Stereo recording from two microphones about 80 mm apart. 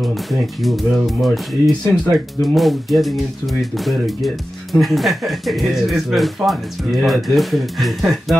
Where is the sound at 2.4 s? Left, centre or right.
Centre.